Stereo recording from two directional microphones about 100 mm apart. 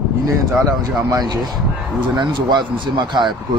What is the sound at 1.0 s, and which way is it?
Speech, 40° right (ahead or behind).